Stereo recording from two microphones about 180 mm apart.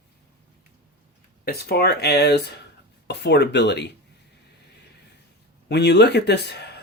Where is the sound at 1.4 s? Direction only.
60° left (ahead or behind).